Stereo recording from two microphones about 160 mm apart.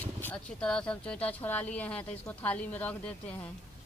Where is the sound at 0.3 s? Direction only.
5° left (ahead or behind).